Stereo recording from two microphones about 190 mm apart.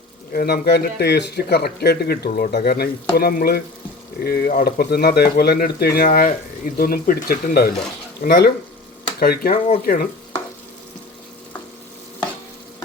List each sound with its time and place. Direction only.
0.3 s speech: 55° left (ahead or behind)